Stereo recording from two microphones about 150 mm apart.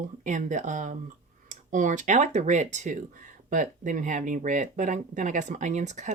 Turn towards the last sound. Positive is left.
turn(degrees=-50)  # may be behind; listen again after turning